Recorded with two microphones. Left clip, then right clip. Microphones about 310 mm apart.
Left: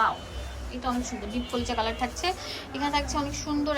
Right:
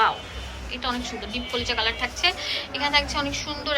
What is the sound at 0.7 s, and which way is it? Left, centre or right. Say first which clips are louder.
A woman's voice: right 3 dB; centre.